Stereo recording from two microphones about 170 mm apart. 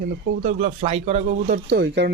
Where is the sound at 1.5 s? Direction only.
65° right (ahead or behind).